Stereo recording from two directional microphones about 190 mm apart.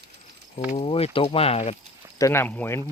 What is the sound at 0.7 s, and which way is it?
Speech, 30° left (ahead or behind).